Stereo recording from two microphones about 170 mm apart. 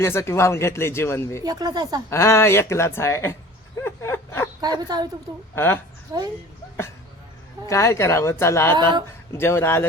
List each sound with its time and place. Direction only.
0.0 s speech: 15° left (ahead or behind)
1.5 s speech: 25° right (ahead or behind)
2.0 s speech: 15° left (ahead or behind)
3.8 s a sound: 15° left (ahead or behind)
4.6 s speech: 25° right (ahead or behind)
5.5 s speech: 10° left (ahead or behind)
7.7 s speech: 15° left (ahead or behind)
8.7 s speech: 25° right (ahead or behind)
9.3 s speech: 15° left (ahead or behind)